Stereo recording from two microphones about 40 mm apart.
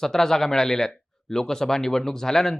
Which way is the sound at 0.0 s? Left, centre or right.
Centre.